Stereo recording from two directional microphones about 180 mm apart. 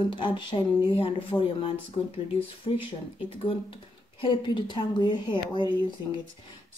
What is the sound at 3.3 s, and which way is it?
A woman's voice, 30° left (ahead or behind).